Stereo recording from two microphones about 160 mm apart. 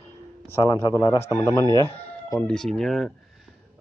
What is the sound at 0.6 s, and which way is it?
Speech, 25° left (ahead or behind).